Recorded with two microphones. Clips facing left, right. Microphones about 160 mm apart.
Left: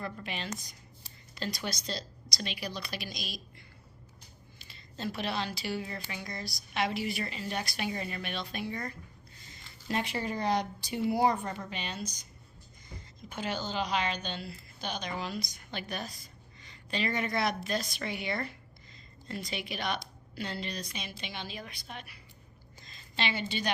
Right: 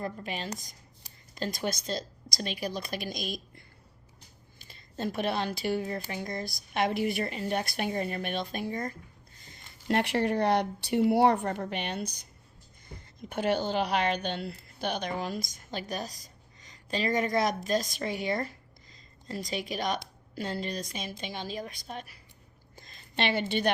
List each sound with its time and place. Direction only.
0.0 s speech: 40° right (ahead or behind)
4.7 s a woman's voice: 50° right (ahead or behind)
9.5 s a woman's voice: 60° right (ahead or behind); by 22.2 s 40° right (ahead or behind)
22.7 s a sound: 55° right (ahead or behind)